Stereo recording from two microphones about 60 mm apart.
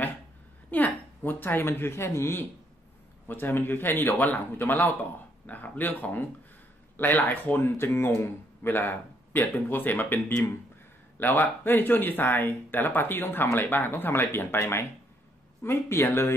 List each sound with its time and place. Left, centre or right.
0.7 s speech: left
7.5 s speech: left
8.6 s speech: left